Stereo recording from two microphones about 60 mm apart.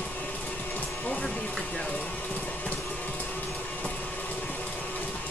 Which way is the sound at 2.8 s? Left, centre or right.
Left.